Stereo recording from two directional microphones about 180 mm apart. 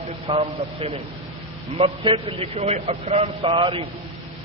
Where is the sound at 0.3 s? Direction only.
30° right (ahead or behind).